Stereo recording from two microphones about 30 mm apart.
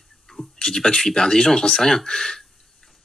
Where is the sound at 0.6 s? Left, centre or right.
Left.